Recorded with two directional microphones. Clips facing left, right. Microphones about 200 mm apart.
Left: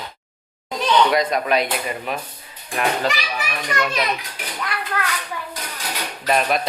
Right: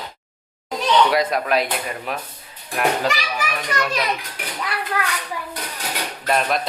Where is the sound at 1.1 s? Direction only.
5° right (ahead or behind).